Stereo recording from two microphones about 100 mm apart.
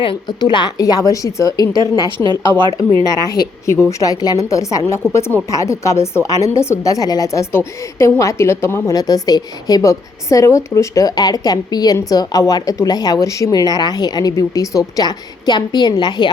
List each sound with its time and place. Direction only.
0.0 s a woman's voice: 50° left (ahead or behind); by 1.7 s 35° left (ahead or behind)
2.1 s speech: 45° right (ahead or behind)
3.0 s a woman's voice: 40° left (ahead or behind)
9.0 s a woman's voice: 40° left (ahead or behind)